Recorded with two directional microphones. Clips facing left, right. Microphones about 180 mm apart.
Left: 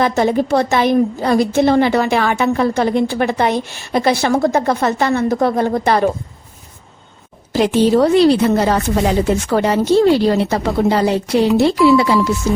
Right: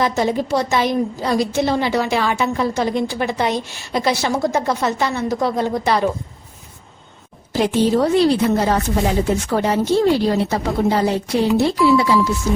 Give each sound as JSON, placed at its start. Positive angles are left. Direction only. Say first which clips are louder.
{"t": 0.0, "sound": "a woman's voice", "louder": "left 4 dB", "side_deg": 60}
{"t": 7.5, "sound": "a woman's voice", "louder": "left 4 dB", "side_deg": 80}